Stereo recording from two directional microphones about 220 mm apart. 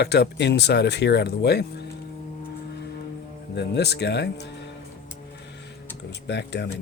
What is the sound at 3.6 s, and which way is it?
Speech, 50° left (ahead or behind).